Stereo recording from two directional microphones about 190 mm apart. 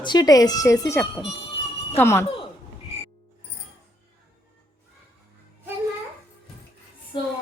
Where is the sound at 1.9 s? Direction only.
15° left (ahead or behind).